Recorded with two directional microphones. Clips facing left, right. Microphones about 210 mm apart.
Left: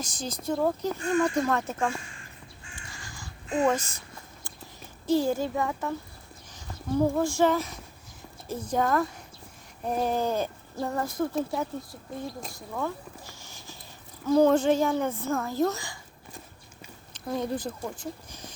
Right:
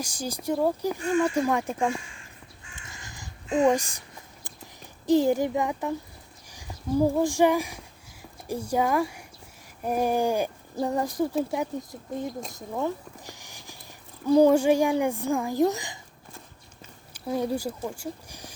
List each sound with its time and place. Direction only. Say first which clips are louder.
0.0 s speech: right 2 dB; 10° right (ahead or behind)
2.7 s crow: even; 20° right (ahead or behind)
4.4 s a sound: even; 15° right (ahead or behind)
6.5 s speech: right 2 dB; 10° right (ahead or behind)
12.5 s a sound: right 3 dB; 20° right (ahead or behind)
14.3 s speech: right 2 dB; 15° right (ahead or behind)
17.2 s speech: right 3 dB; 10° right (ahead or behind)